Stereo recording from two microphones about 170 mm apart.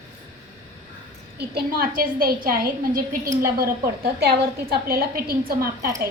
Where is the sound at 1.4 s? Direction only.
65° right (ahead or behind).